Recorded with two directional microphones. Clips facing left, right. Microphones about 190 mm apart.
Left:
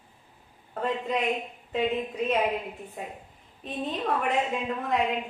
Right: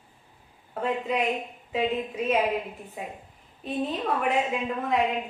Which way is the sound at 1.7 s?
Centre (ahead or behind).